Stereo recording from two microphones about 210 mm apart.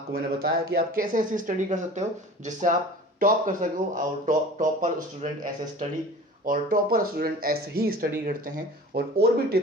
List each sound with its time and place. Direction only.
0.1 s speech: 45° right (ahead or behind)